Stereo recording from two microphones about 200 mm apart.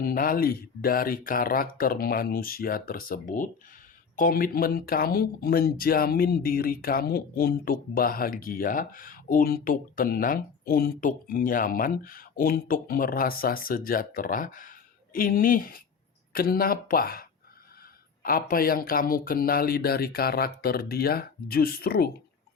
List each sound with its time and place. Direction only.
0.0 s speech: 45° left (ahead or behind)